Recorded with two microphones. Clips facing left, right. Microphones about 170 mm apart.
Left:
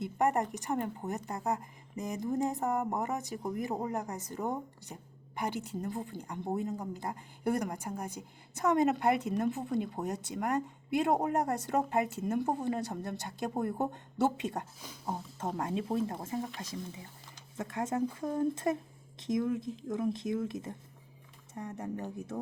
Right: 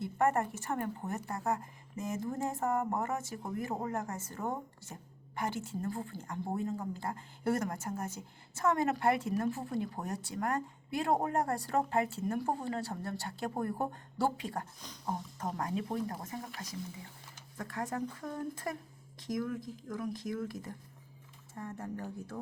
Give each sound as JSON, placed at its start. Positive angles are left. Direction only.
{"t": 0.0, "sound": "a woman's voice", "side_deg": 15}
{"t": 14.8, "sound": "speech", "side_deg": 5}
{"t": 15.4, "sound": "a woman's voice", "side_deg": 25}